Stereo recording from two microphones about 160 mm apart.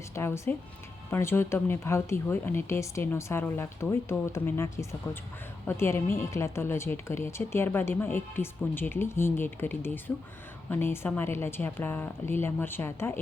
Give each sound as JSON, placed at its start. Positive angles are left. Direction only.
{"t": 0.1, "sound": "a woman's voice", "side_deg": 15}